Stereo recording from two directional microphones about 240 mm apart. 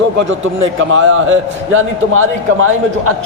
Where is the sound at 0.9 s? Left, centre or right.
Right.